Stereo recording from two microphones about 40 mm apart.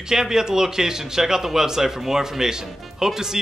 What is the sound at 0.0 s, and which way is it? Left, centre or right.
Speech, centre.